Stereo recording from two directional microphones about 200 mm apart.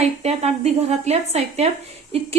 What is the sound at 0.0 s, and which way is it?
A woman's voice, 30° right (ahead or behind).